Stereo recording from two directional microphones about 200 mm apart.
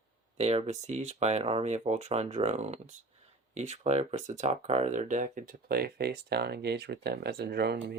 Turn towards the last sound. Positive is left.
turn(degrees=-55)  # may be behind; listen again after turning